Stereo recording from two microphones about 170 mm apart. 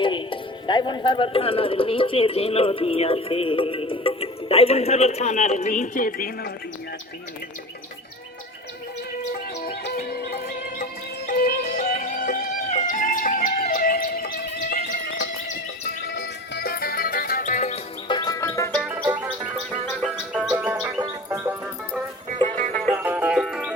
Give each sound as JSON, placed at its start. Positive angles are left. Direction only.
{"t": 0.0, "sound": "speech", "side_deg": 30}
{"t": 9.6, "sound": "music", "side_deg": 70}
{"t": 11.9, "sound": "music", "side_deg": 50}
{"t": 16.0, "sound": "music", "side_deg": 80}
{"t": 18.1, "sound": "music", "side_deg": 25}
{"t": 20.0, "sound": "music", "side_deg": -5}
{"t": 22.4, "sound": "music", "side_deg": -40}
{"t": 22.7, "sound": "music", "side_deg": 5}
{"t": 23.0, "sound": "music", "side_deg": -10}